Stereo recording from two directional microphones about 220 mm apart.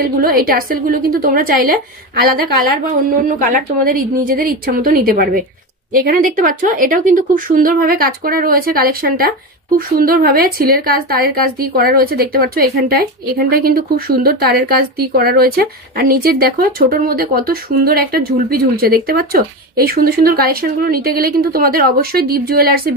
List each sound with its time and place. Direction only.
0.2 s speech: 40° right (ahead or behind)